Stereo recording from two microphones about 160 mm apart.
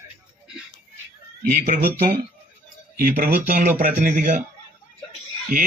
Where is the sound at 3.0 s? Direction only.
65° right (ahead or behind).